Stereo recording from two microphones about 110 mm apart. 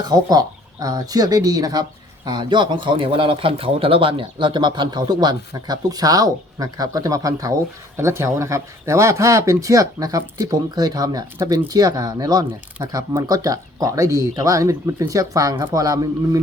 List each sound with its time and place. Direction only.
0.1 s speech: 35° right (ahead or behind)